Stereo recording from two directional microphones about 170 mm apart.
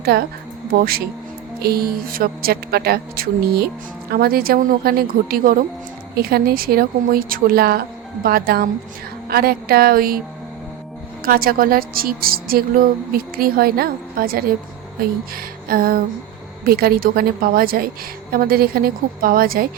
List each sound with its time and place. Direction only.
0.0 s speech: 65° right (ahead or behind)
11.2 s speech: 60° right (ahead or behind)
15.4 s music: 60° right (ahead or behind)
16.6 s speech: 65° right (ahead or behind)